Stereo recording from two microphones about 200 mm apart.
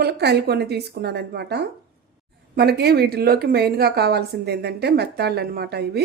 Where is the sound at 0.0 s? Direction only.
55° right (ahead or behind).